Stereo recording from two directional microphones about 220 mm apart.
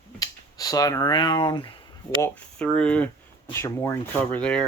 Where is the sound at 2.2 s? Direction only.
5° left (ahead or behind).